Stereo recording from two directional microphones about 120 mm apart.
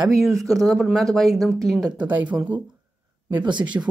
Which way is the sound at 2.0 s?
10° right (ahead or behind).